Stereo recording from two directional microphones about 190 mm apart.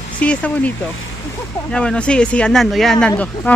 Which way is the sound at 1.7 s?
5° left (ahead or behind).